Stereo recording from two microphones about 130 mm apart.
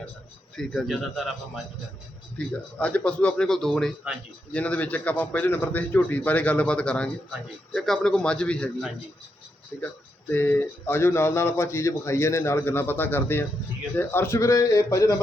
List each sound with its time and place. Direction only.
0.5 s a man's voice: 5° left (ahead or behind)
2.5 s speech: 10° left (ahead or behind)
10.2 s speech: 15° left (ahead or behind)